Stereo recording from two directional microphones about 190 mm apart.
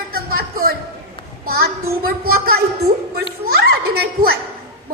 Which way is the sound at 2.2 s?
55° right (ahead or behind).